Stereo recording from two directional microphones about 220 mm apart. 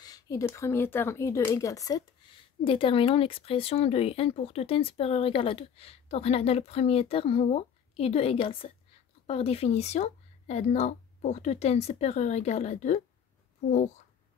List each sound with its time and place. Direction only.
0.0 s speech: 15° left (ahead or behind); by 13.0 s 30° left (ahead or behind)